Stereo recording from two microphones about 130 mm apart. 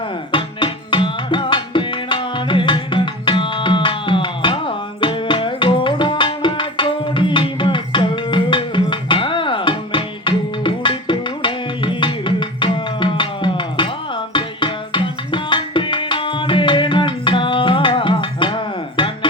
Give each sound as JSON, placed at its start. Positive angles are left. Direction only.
{"t": 0.3, "sound": "tabla", "side_deg": 40}